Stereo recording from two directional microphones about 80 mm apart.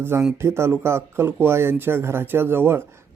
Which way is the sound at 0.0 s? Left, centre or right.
Right.